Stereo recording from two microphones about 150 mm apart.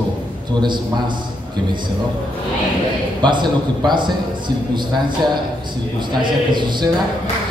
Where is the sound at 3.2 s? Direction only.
30° right (ahead or behind).